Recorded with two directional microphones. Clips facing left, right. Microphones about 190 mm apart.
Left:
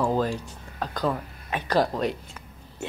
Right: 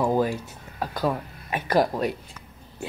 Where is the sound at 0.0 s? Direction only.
10° right (ahead or behind).